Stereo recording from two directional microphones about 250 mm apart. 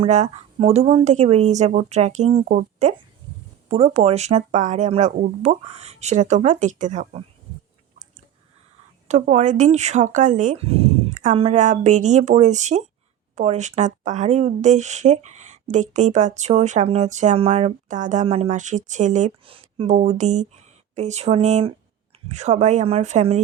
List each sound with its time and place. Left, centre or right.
0.0 s speech: right
9.0 s speech: right